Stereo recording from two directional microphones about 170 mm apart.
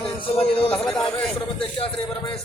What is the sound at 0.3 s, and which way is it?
Speech, 35° left (ahead or behind).